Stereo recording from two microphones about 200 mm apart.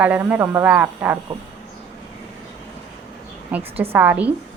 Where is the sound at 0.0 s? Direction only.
10° right (ahead or behind).